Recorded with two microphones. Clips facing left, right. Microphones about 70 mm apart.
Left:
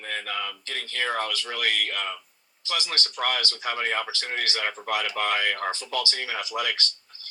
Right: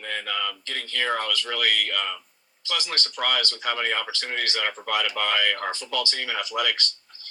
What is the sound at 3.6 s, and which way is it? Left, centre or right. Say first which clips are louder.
Speech: right 1 dB; centre.